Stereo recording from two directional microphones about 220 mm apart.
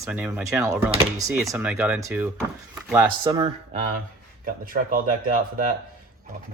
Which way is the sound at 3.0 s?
20° right (ahead or behind).